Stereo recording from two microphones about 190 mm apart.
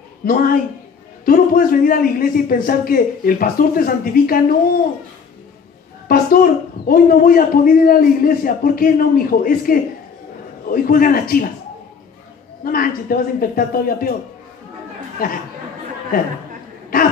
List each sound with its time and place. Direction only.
0.2 s a man's voice: 50° left (ahead or behind)
6.0 s a man's voice: 50° left (ahead or behind)
12.6 s a man's voice: 50° left (ahead or behind)
15.2 s a man's voice: 50° left (ahead or behind)